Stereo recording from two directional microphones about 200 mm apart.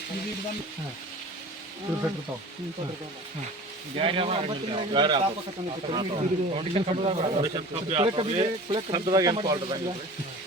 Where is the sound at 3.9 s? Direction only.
25° right (ahead or behind).